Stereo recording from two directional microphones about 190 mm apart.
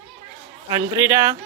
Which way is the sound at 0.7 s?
15° right (ahead or behind).